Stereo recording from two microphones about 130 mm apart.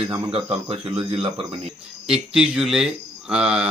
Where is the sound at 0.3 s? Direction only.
45° right (ahead or behind).